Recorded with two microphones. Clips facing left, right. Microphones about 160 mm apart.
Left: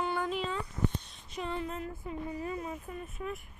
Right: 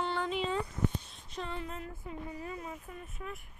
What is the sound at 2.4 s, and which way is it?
Speech, 30° left (ahead or behind).